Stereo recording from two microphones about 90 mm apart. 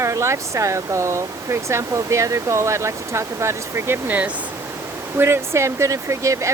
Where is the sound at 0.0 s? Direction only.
35° right (ahead or behind).